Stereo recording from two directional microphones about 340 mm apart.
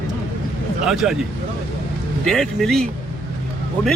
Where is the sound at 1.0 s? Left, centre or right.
Centre.